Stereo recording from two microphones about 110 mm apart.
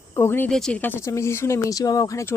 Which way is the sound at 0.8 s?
20° left (ahead or behind).